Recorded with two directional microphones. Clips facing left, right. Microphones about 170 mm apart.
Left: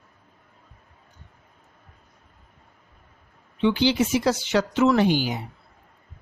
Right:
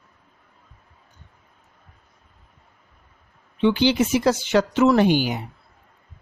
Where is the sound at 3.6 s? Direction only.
55° right (ahead or behind).